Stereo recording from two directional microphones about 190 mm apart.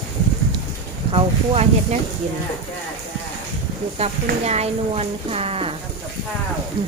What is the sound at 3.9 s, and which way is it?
Speech, 35° right (ahead or behind).